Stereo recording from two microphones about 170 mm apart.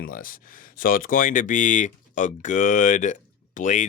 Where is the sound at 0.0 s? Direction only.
55° left (ahead or behind).